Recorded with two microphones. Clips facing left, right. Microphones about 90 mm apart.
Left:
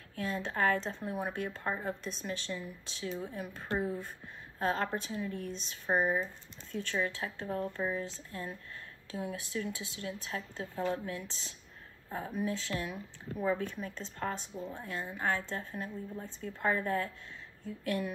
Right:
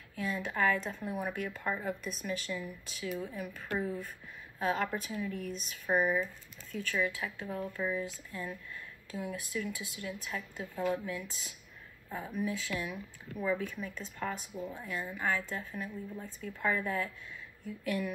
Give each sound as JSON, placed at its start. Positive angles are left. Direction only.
{"t": 0.2, "sound": "speech", "side_deg": 35}
{"t": 14.5, "sound": "speech", "side_deg": -10}
{"t": 14.8, "sound": "speech", "side_deg": 30}